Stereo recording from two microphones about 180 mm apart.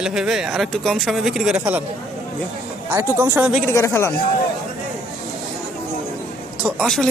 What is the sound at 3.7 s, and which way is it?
Speech, 15° left (ahead or behind).